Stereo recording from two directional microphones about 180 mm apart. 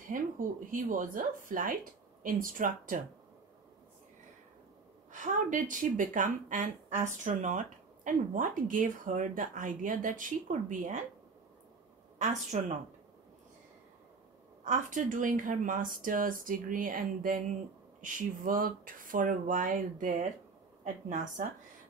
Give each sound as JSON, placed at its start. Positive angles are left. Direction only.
{"t": 0.7, "sound": "speech", "side_deg": -45}
{"t": 5.1, "sound": "speech", "side_deg": -45}
{"t": 12.2, "sound": "speech", "side_deg": -40}
{"t": 14.6, "sound": "speech", "side_deg": -45}